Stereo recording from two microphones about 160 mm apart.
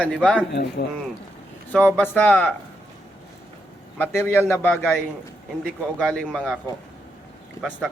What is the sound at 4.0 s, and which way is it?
A man's voice, 15° left (ahead or behind).